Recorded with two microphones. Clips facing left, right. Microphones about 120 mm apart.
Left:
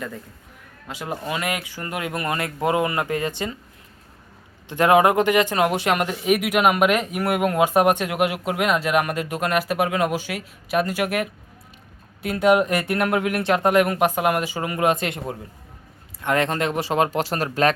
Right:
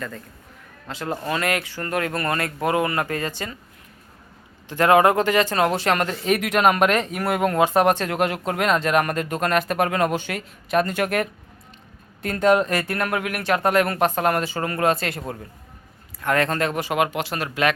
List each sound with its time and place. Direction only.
0.9 s speech: 10° left (ahead or behind)
4.7 s speech: 20° left (ahead or behind); by 17.7 s 35° left (ahead or behind)